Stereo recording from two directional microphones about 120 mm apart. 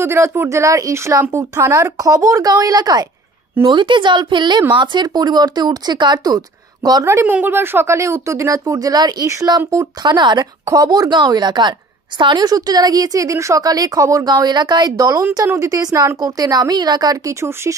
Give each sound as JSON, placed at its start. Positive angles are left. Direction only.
{"t": 0.0, "sound": "a woman's voice", "side_deg": -20}
{"t": 10.0, "sound": "a woman's voice", "side_deg": -40}